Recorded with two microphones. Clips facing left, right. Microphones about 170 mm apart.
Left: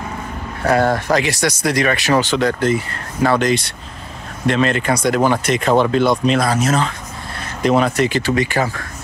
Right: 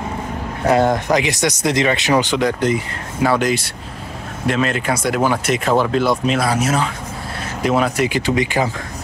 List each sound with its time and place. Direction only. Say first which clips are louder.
0.7 s speech: right 1 dB; 20° right (ahead or behind)